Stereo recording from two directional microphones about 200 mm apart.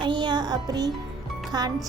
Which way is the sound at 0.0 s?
25° right (ahead or behind).